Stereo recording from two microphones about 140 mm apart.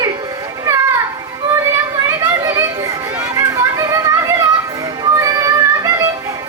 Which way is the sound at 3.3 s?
25° right (ahead or behind).